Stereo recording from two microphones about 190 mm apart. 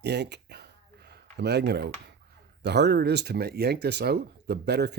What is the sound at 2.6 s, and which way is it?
Speech, 65° right (ahead or behind).